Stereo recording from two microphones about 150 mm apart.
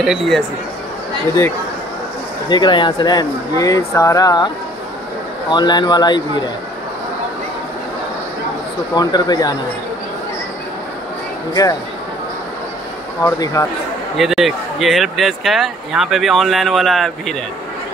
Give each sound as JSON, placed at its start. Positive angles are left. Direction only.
{"t": 0.0, "sound": "speech", "side_deg": 0}
{"t": 2.5, "sound": "speech", "side_deg": 30}
{"t": 5.5, "sound": "speech", "side_deg": 30}
{"t": 8.9, "sound": "speech", "side_deg": 25}
{"t": 13.4, "sound": "speech", "side_deg": 20}
{"t": 14.1, "sound": "speech", "side_deg": 0}